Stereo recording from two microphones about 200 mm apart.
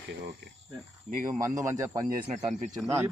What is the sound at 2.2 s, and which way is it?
Speech, 35° right (ahead or behind).